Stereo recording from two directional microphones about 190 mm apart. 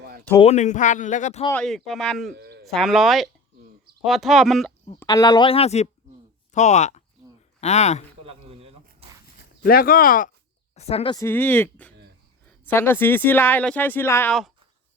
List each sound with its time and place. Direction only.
0.4 s speech: 40° left (ahead or behind)
1.6 s speech: centre (ahead or behind)
2.3 s sheep: 60° right (ahead or behind)
2.7 s speech: centre (ahead or behind)
5.0 s speech: 20° left (ahead or behind)
8.2 s a sound: 30° right (ahead or behind)
9.6 s speech: 50° left (ahead or behind)
10.8 s speech: 30° left (ahead or behind)
11.2 s speech: 10° left (ahead or behind)